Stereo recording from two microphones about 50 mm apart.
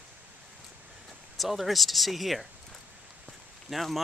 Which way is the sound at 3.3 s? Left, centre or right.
Centre.